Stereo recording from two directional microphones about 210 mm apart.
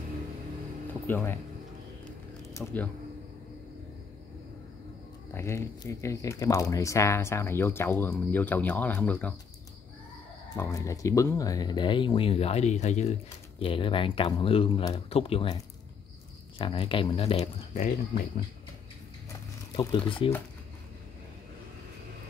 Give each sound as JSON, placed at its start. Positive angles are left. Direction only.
{"t": 1.0, "sound": "speech", "side_deg": 10}
{"t": 2.4, "sound": "a sound", "side_deg": 10}
{"t": 5.3, "sound": "speech", "side_deg": 15}
{"t": 10.5, "sound": "speech", "side_deg": 15}
{"t": 19.7, "sound": "speech", "side_deg": 25}